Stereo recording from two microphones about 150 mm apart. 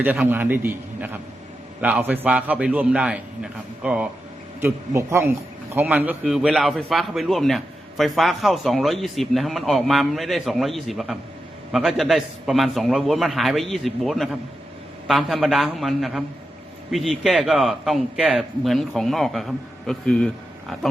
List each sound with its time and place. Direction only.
0.3 s a man's voice: 15° right (ahead or behind); by 20.7 s 5° left (ahead or behind)